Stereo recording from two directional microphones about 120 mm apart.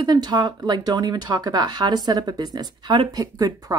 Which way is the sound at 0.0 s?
35° right (ahead or behind).